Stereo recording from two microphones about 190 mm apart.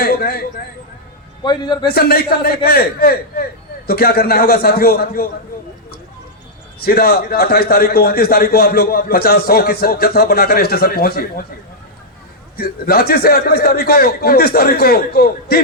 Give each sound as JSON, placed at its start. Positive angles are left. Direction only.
{"t": 0.0, "sound": "a sound", "side_deg": 50}
{"t": 1.5, "sound": "a man's voice", "side_deg": 25}
{"t": 1.9, "sound": "a man's voice", "side_deg": 55}
{"t": 6.7, "sound": "a man's voice", "side_deg": 55}
{"t": 12.5, "sound": "a man's voice", "side_deg": 55}